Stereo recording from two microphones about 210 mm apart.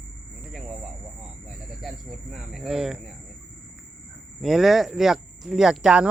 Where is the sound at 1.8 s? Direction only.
Centre (ahead or behind).